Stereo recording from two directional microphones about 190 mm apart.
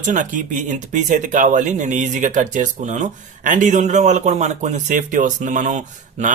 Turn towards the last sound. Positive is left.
turn(degrees=-40)  # may be behind; listen again after turning